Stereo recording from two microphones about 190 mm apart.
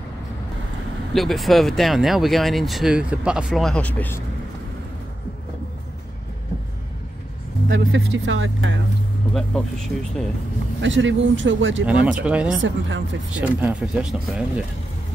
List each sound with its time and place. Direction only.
1.1 s speech: centre (ahead or behind)
7.7 s speech: 90° right
9.3 s speech: 5° left (ahead or behind)
10.8 s speech: 80° right
11.8 s speech: 5° right (ahead or behind)
12.6 s speech: 75° right (ahead or behind)
13.4 s speech: 5° right (ahead or behind)